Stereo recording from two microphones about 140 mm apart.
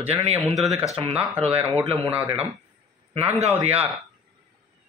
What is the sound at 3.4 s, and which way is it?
Speech, 50° right (ahead or behind).